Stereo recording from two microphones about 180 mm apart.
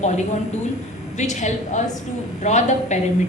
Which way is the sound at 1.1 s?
40° left (ahead or behind).